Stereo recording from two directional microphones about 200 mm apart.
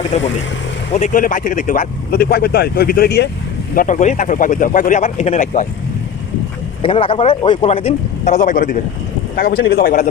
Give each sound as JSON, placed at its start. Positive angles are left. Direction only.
{"t": 0.1, "sound": "speech", "side_deg": 35}
{"t": 3.8, "sound": "speech", "side_deg": 40}
{"t": 6.8, "sound": "speech", "side_deg": 25}